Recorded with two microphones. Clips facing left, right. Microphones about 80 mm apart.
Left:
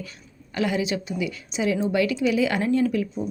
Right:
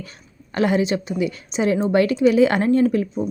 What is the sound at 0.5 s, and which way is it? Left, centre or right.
A woman's voice, right.